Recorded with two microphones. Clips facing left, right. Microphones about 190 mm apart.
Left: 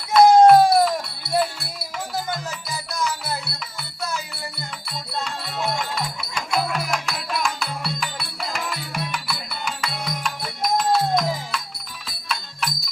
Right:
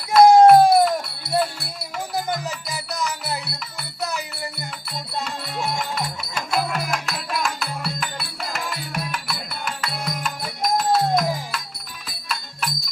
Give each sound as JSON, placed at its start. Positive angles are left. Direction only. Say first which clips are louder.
{"t": 0.1, "sound": "a sound", "louder": "right 1 dB", "side_deg": -5}
{"t": 2.4, "sound": "music", "louder": "right 1 dB", "side_deg": -20}
{"t": 4.9, "sound": "music", "louder": "even", "side_deg": 0}